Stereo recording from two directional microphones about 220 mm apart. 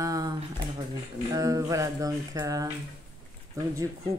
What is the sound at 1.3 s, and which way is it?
Speech, 15° right (ahead or behind).